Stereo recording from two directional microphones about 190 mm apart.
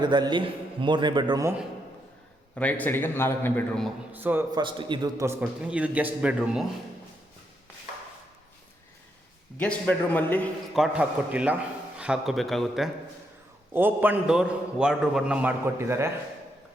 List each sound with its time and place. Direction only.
0.0 s a man's voice: 25° right (ahead or behind)
2.6 s a man's voice: 10° left (ahead or behind)
4.1 s a man's voice: 10° right (ahead or behind)
4.5 s a man's voice: 25° right (ahead or behind); by 6.7 s 5° right (ahead or behind)
9.6 s a man's voice: 5° left (ahead or behind)
10.8 s a man's voice: 5° right (ahead or behind)